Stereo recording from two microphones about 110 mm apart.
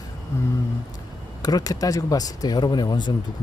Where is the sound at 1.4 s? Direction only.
35° left (ahead or behind).